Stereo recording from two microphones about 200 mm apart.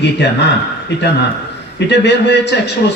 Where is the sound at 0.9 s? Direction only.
55° left (ahead or behind).